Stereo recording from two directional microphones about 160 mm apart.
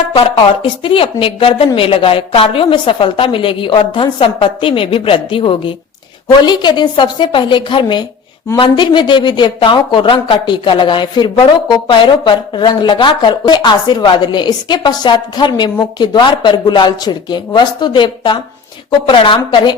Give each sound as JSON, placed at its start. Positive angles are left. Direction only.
{"t": 0.1, "sound": "a woman's voice", "side_deg": 35}